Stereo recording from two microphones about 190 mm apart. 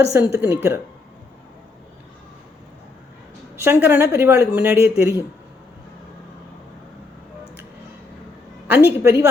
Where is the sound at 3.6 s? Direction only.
10° right (ahead or behind).